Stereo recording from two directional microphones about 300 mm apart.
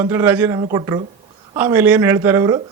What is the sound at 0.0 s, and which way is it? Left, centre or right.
Speech, centre.